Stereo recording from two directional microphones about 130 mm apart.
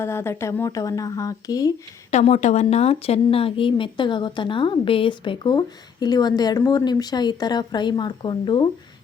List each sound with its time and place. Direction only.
0.0 s speech: 20° left (ahead or behind)
2.0 s a woman's voice: 55° left (ahead or behind); by 8.7 s 35° left (ahead or behind)